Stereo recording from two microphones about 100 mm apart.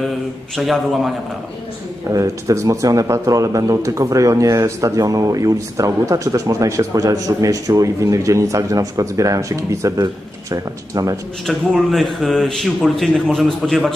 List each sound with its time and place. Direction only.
0.6 s speech: centre (ahead or behind)
2.0 s speech: 35° right (ahead or behind)
11.4 s speech: centre (ahead or behind)